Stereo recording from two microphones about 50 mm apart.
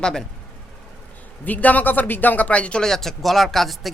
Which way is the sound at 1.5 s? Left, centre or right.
Left.